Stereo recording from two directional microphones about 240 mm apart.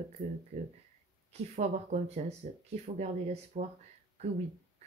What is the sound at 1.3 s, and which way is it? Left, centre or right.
Speech, right.